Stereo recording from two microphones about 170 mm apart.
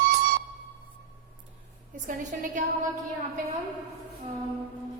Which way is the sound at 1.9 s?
50° right (ahead or behind).